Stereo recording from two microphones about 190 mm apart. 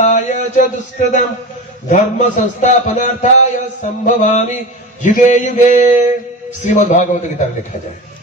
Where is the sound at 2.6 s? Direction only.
40° left (ahead or behind).